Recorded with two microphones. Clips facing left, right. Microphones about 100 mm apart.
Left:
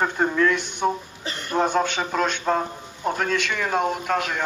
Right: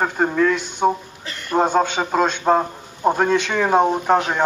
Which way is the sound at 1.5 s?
20° right (ahead or behind).